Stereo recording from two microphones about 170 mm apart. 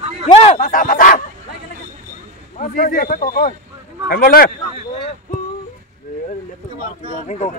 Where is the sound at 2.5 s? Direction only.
55° left (ahead or behind).